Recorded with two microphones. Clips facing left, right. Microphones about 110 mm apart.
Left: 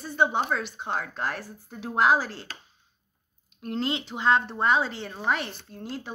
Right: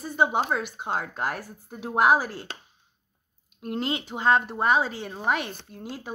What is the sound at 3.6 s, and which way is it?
A woman's voice, 10° right (ahead or behind).